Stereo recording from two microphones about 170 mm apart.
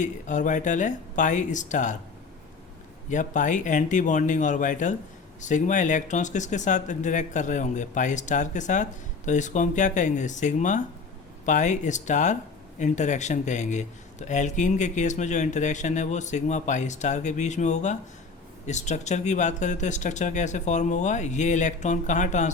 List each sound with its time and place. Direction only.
0.0 s speech: 45° left (ahead or behind)
3.1 s speech: 45° left (ahead or behind)